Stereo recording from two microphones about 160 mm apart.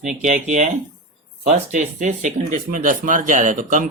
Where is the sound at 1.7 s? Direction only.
50° right (ahead or behind).